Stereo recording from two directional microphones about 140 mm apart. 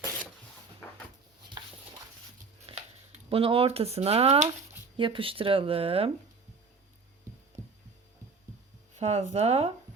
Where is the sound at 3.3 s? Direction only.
40° right (ahead or behind).